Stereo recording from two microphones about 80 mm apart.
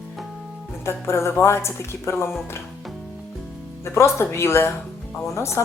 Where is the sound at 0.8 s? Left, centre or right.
Left.